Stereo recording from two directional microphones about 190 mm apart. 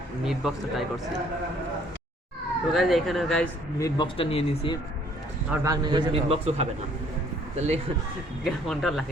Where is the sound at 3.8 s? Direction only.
20° left (ahead or behind).